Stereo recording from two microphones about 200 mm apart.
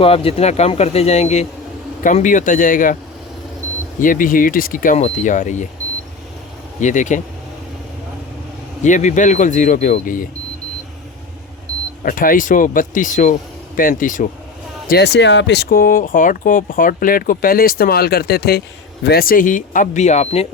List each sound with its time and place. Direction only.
0.0 s speech: 30° left (ahead or behind)
4.0 s speech: 45° left (ahead or behind)
6.7 s speech: 40° left (ahead or behind)
8.8 s speech: 35° left (ahead or behind)
12.0 s speech: 45° left (ahead or behind)
14.8 s speech: 55° left (ahead or behind); by 20.5 s 35° left (ahead or behind)